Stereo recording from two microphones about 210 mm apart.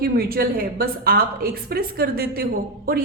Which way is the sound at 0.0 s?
45° right (ahead or behind).